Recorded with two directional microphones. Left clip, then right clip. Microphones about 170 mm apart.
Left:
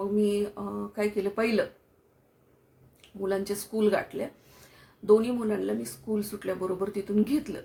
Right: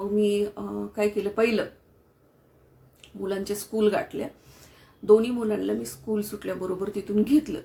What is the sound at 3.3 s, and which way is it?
Speech, 5° left (ahead or behind).